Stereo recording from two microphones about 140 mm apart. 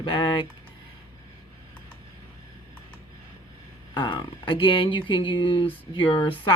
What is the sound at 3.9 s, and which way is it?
Speech, 35° left (ahead or behind).